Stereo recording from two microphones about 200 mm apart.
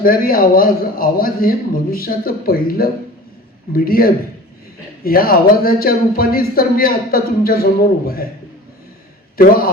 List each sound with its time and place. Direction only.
0.0 s a man's voice: 45° left (ahead or behind)
9.4 s a man's voice: 45° left (ahead or behind)